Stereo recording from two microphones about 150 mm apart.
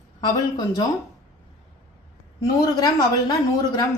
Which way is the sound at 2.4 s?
25° left (ahead or behind).